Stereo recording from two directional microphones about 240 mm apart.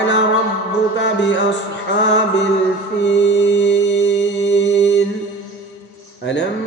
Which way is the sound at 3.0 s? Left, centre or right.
Left.